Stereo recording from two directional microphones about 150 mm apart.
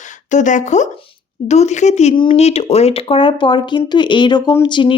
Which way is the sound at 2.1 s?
35° left (ahead or behind).